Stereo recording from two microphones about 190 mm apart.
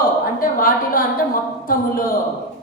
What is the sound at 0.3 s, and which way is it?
A woman's voice, 50° left (ahead or behind).